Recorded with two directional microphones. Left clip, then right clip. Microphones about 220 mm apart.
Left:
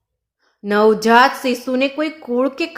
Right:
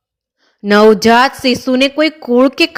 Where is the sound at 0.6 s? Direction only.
35° right (ahead or behind).